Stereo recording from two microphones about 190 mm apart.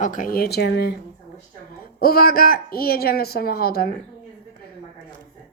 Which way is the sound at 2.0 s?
50° left (ahead or behind).